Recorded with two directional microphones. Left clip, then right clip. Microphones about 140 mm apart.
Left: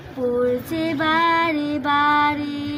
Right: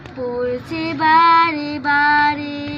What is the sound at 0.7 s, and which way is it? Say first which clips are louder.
Child singing: right 10 dB; 20° left (ahead or behind).